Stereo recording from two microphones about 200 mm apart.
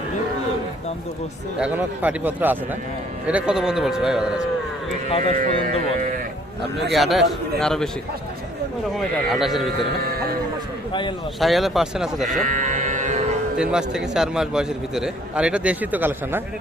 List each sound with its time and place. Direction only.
1.5 s a man's voice: 5° right (ahead or behind)
5.0 s speech: 25° left (ahead or behind)
5.6 s speech: 45° right (ahead or behind)
6.9 s a man's voice: centre (ahead or behind)
9.0 s a man's voice: centre (ahead or behind)
11.3 s a man's voice: centre (ahead or behind)
12.5 s music: 40° right (ahead or behind)
13.6 s a man's voice: 5° right (ahead or behind)